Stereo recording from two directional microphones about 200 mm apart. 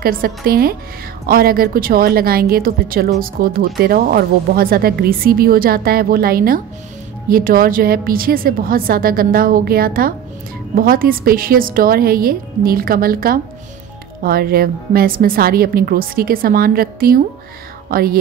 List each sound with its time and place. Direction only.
0.0 s a woman's voice: 50° right (ahead or behind)